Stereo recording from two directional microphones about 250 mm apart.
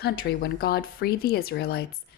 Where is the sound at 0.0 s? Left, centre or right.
Left.